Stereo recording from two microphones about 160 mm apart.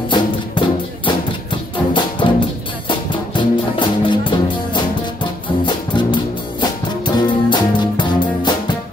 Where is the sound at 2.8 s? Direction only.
30° left (ahead or behind).